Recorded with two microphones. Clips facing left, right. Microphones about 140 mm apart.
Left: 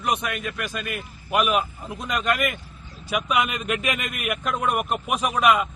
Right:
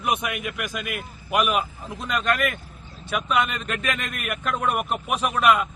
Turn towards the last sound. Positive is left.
turn(degrees=0)  # may be behind; listen again after turning